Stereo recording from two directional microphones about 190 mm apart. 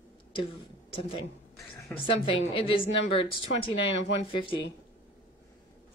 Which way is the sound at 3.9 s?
65° left (ahead or behind).